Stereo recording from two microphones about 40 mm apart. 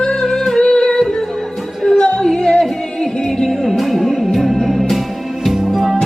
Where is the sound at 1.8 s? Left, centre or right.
Left.